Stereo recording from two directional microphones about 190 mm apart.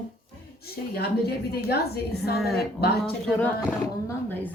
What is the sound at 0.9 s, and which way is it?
A woman's voice, 55° left (ahead or behind).